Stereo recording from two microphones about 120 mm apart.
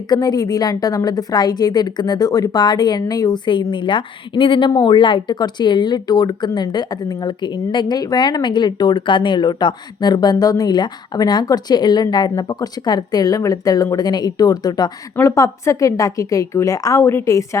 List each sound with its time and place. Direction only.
0.1 s a woman's voice: 35° left (ahead or behind)